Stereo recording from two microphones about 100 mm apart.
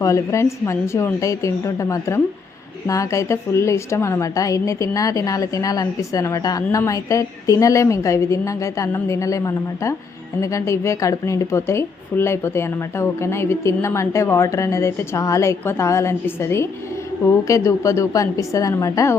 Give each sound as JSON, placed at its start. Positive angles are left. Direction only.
{"t": 0.0, "sound": "a woman's voice", "side_deg": 30}